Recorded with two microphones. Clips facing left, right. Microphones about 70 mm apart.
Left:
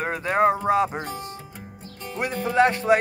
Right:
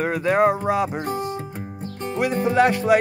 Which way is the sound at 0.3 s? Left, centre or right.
Centre.